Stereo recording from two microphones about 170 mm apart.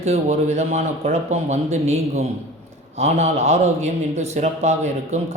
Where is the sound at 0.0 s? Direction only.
40° right (ahead or behind).